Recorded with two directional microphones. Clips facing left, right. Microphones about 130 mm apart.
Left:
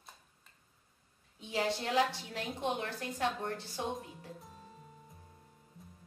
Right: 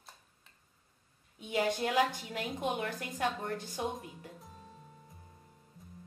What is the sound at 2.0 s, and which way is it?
Speech, 15° right (ahead or behind).